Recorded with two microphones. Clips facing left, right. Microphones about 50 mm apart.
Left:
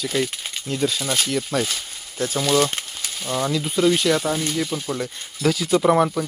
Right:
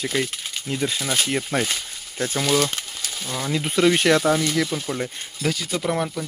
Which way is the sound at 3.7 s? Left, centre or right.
Right.